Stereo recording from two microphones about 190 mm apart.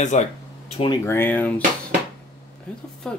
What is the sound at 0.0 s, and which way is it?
Speech, 40° left (ahead or behind).